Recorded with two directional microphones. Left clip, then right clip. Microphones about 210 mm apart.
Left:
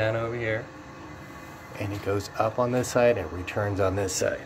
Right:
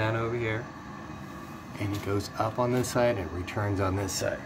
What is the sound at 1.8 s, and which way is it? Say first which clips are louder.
Speech: left 3 dB; 20° left (ahead or behind).